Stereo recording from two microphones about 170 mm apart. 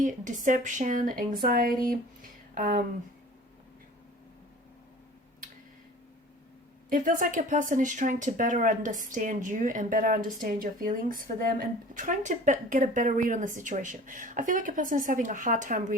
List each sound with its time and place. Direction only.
0.0 s speech: 50° right (ahead or behind)
6.9 s speech: 50° right (ahead or behind)